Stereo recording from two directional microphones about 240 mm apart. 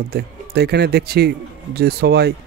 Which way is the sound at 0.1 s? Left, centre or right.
Right.